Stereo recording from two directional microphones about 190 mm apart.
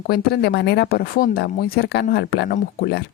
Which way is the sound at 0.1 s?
55° left (ahead or behind).